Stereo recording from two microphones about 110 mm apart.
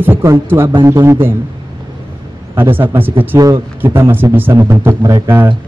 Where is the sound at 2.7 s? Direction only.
20° right (ahead or behind).